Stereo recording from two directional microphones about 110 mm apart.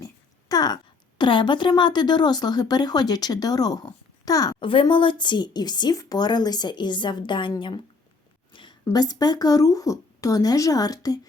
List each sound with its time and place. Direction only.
0.0 s a sound: 35° left (ahead or behind)
1.2 s speech: 45° left (ahead or behind)
4.6 s speech: 50° left (ahead or behind)
8.8 s speech: 35° left (ahead or behind)